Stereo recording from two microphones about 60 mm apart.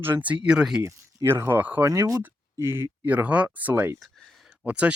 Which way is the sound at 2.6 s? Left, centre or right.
Right.